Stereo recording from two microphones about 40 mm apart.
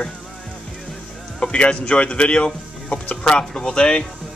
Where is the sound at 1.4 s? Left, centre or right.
Left.